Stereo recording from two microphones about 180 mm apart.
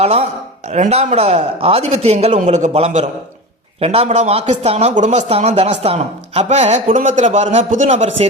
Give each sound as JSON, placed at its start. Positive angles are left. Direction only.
{"t": 0.0, "sound": "speech", "side_deg": -35}